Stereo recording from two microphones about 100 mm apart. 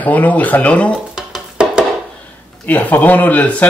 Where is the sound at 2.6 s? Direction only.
15° left (ahead or behind).